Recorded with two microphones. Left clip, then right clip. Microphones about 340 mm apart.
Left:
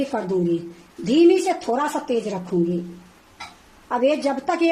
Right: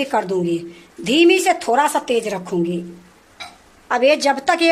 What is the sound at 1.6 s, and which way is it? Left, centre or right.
Speech, right.